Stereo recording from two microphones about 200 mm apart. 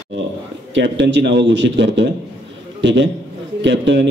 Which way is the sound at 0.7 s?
60° right (ahead or behind).